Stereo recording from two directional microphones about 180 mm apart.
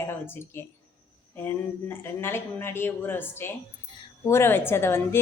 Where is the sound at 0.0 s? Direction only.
15° left (ahead or behind).